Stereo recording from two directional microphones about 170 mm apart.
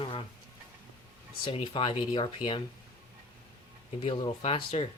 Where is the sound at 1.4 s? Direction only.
30° left (ahead or behind).